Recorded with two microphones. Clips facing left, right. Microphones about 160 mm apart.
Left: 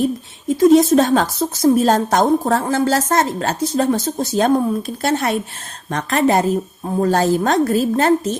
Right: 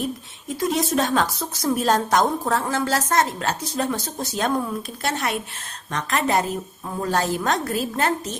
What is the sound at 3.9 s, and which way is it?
A woman's voice, 25° left (ahead or behind).